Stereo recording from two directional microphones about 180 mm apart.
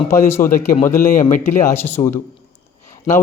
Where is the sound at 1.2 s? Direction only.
45° left (ahead or behind).